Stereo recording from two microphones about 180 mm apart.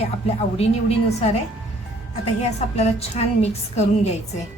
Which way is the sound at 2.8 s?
35° left (ahead or behind).